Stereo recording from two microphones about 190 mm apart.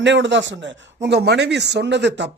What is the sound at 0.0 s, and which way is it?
A man's voice, 70° right (ahead or behind).